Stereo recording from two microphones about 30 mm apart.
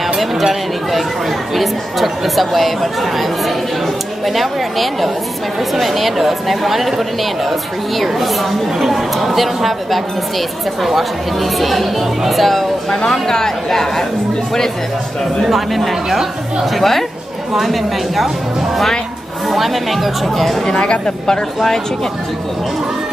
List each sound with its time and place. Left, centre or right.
0.2 s speech: centre
13.0 s speech: centre
15.4 s speech: centre
16.7 s speech: centre
19.5 s speech: centre
20.6 s speech: left